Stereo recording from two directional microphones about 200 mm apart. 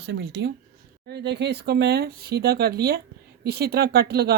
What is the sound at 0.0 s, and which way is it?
Speech, 60° right (ahead or behind).